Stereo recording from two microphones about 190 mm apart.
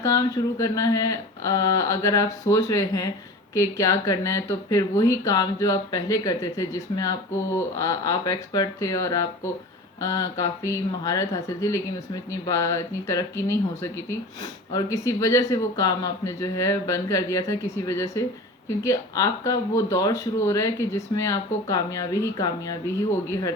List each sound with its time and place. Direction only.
0.0 s speech: 15° left (ahead or behind)